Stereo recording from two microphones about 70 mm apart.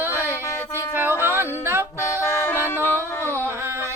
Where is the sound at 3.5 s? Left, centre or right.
Right.